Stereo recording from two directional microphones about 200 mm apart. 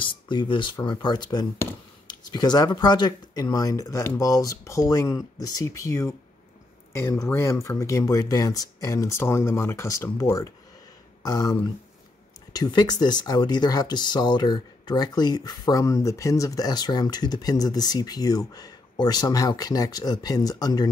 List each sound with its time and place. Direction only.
0.0 s speech: 25° left (ahead or behind)
12.5 s speech: 20° left (ahead or behind)